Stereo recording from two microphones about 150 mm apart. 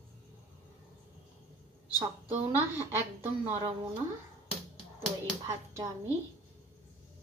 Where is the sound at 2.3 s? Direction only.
15° right (ahead or behind).